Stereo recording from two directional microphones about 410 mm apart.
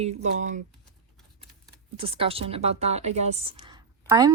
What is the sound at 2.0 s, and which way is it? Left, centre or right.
A woman's voice, centre.